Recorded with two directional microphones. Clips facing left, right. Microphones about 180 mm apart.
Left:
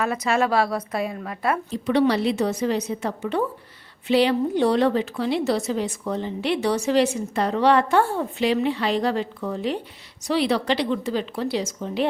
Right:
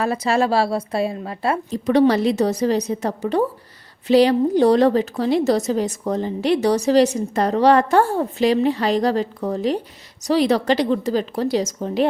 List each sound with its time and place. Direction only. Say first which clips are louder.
0.0 s speech: right 3 dB; 30° right (ahead or behind)
1.7 s a woman's voice: right 5 dB; 40° right (ahead or behind)